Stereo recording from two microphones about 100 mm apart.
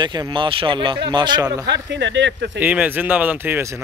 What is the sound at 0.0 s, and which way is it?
Speech, 50° right (ahead or behind).